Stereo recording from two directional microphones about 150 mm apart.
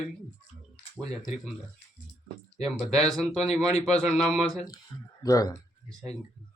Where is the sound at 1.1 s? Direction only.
Centre (ahead or behind).